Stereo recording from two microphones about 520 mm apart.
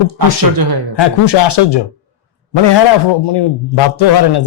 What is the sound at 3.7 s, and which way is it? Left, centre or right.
Speech, left.